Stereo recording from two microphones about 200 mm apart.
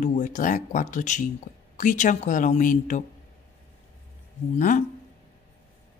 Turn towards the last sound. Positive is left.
turn(degrees=40)  # may be behind; listen again after turning